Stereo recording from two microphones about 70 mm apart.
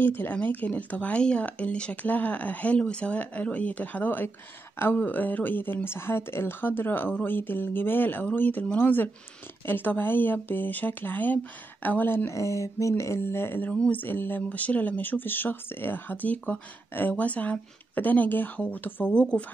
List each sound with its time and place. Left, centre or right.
0.0 s speech: left
12.3 s speech: left
13.7 s speech: centre